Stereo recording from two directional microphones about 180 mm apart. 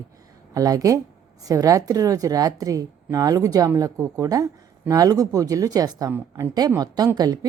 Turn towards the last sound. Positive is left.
turn(degrees=-20)  # may be behind; listen again after turning